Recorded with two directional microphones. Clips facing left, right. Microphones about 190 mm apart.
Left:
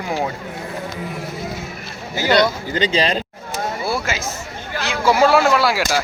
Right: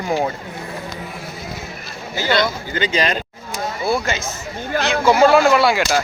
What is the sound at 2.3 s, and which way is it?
Speech, 35° left (ahead or behind).